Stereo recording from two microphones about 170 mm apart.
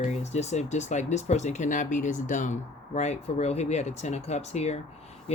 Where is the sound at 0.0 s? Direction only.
40° left (ahead or behind).